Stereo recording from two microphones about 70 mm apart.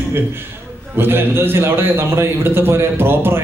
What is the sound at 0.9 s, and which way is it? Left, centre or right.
A man's voice, right.